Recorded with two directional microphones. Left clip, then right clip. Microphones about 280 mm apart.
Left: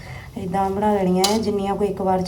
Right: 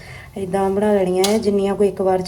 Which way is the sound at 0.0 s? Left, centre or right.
Right.